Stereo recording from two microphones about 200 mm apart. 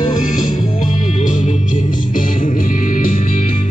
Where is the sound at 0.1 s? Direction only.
40° left (ahead or behind).